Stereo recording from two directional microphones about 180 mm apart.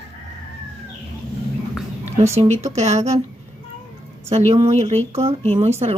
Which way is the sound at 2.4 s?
35° right (ahead or behind).